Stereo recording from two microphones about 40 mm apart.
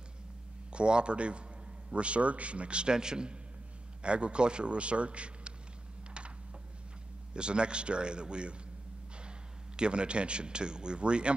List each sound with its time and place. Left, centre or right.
0.7 s speech: right
7.3 s speech: right
9.8 s speech: right